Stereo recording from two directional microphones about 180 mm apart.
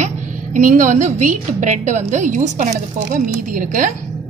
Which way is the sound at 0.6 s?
45° right (ahead or behind).